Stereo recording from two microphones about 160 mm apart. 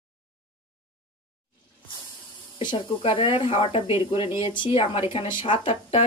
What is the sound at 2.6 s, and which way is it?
Speech, 30° left (ahead or behind).